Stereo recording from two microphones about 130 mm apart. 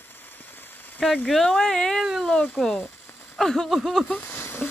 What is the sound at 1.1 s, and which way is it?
Speech, 5° left (ahead or behind).